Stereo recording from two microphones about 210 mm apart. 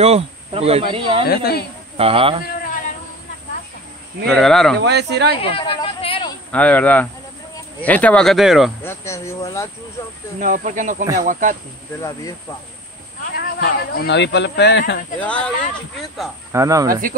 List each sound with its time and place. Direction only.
0.0 s speech: 30° right (ahead or behind)
1.2 s a woman's voice: 45° left (ahead or behind)
2.0 s speech: 25° right (ahead or behind)
2.4 s a sound: 40° left (ahead or behind)
4.3 s speech: centre (ahead or behind)
4.7 s speech: 55° right (ahead or behind)
5.4 s a sound: 25° left (ahead or behind)
6.5 s speech: 5° left (ahead or behind)
8.8 s speech: 15° left (ahead or behind)
10.4 s speech: 35° right (ahead or behind)
12.0 s speech: 15° left (ahead or behind)
13.3 s speech: 45° left (ahead or behind)
15.1 s speech: 5° left (ahead or behind)
16.5 s speech: 15° right (ahead or behind)